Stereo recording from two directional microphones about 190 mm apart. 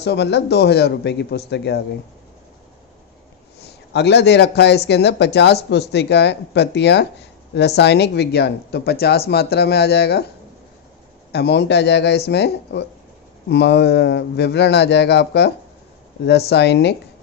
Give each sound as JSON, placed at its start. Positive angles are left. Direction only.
{"t": 0.0, "sound": "speech", "side_deg": 60}
{"t": 3.9, "sound": "speech", "side_deg": 60}
{"t": 11.3, "sound": "speech", "side_deg": 60}